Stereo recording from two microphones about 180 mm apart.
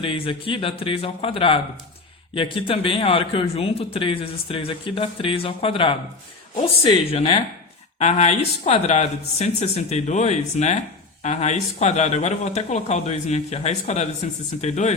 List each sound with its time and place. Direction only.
0.0 s a man's voice: 30° left (ahead or behind)